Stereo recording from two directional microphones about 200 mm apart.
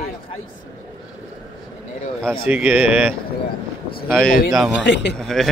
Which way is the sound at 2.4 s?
10° right (ahead or behind).